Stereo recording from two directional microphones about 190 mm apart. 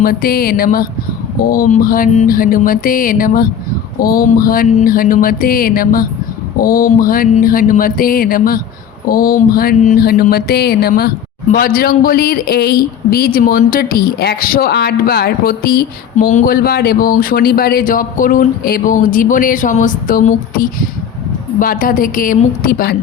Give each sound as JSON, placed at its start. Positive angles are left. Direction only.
{"t": 0.0, "sound": "a man's voice", "side_deg": 50}